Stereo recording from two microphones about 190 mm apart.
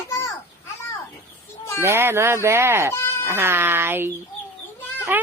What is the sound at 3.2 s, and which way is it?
Speech, 10° right (ahead or behind).